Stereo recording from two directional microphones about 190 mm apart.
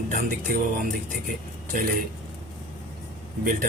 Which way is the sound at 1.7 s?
45° right (ahead or behind).